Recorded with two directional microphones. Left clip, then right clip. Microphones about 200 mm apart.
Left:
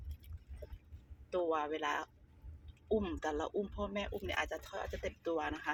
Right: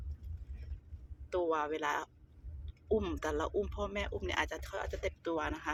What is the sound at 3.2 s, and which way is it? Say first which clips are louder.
Speech: right 3 dB; 10° right (ahead or behind).